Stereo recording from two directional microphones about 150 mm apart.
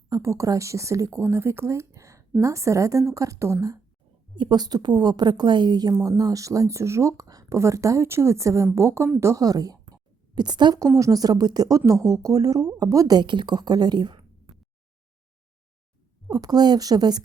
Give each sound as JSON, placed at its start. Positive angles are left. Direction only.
{"t": 0.1, "sound": "a woman's voice", "side_deg": -20}
{"t": 16.3, "sound": "a woman's voice", "side_deg": -25}